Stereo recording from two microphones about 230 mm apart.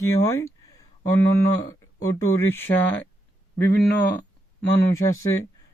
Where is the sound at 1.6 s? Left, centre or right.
Centre.